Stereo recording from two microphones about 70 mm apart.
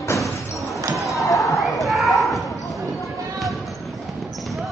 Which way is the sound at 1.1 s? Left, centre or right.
Left.